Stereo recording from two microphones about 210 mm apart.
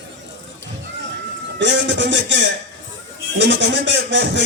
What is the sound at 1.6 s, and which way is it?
A man's voice, 55° right (ahead or behind).